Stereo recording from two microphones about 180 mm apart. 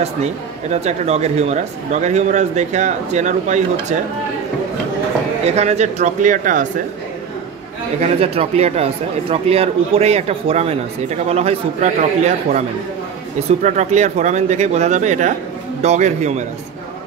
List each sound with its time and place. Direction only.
0.0 s speech: 35° right (ahead or behind)
5.4 s speech: 35° right (ahead or behind)
8.2 s speech: 35° right (ahead or behind)